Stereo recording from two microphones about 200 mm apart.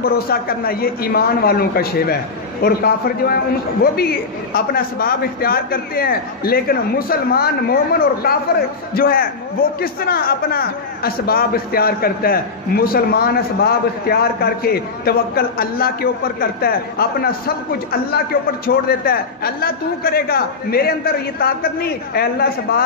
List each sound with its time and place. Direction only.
0.0 s a man's voice: 50° left (ahead or behind)
18.7 s a man's voice: 50° left (ahead or behind)